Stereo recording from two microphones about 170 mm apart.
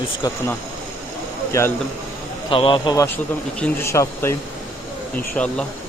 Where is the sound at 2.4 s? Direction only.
30° left (ahead or behind).